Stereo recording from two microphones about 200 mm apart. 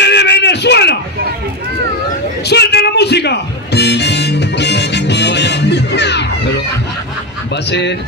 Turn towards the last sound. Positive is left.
turn(degrees=60)  # may be behind; listen again after turning